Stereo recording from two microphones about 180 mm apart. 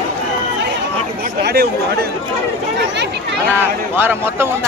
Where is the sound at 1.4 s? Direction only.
60° right (ahead or behind).